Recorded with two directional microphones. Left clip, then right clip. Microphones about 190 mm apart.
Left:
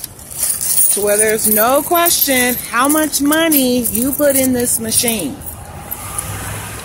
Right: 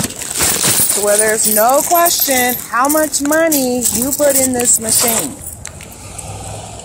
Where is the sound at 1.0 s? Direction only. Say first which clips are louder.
Even; 5° left (ahead or behind).